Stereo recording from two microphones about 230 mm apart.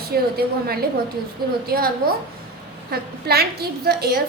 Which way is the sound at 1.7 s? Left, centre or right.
Right.